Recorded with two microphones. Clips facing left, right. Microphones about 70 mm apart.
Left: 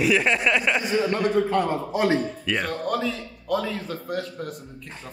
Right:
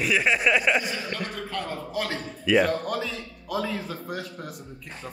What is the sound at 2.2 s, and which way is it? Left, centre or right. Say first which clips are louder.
Speech: right 5 dB; centre.